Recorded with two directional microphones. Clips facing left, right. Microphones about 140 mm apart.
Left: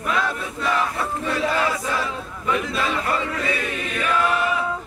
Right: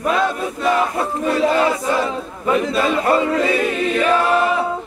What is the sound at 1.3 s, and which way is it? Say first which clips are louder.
Battle cry: right 6 dB; 30° right (ahead or behind).